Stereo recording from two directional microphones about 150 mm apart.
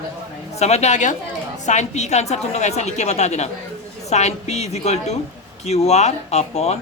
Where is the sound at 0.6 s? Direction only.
45° left (ahead or behind).